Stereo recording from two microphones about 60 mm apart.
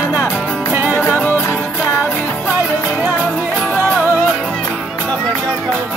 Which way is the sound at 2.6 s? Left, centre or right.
Right.